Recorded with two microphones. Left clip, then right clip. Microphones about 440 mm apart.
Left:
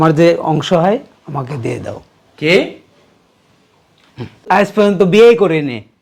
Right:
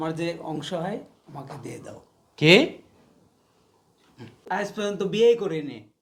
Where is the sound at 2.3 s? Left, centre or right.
Right.